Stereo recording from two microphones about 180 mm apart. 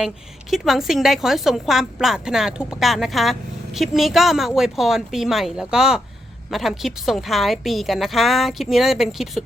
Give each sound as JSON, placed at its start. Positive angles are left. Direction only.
{"t": 0.5, "sound": "a woman's voice", "side_deg": 0}